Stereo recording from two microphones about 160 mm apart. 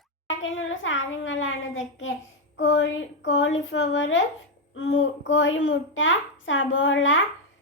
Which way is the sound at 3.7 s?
90° left.